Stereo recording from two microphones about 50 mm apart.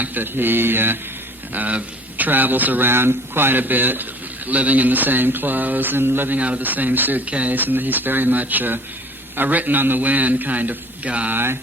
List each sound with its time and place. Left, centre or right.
0.0 s mantra: right
1.5 s speech: right
6.3 s speech: right
7.3 s speech: right
11.3 s mantra: right